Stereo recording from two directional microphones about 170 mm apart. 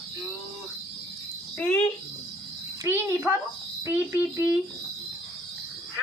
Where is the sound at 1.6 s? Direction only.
10° left (ahead or behind).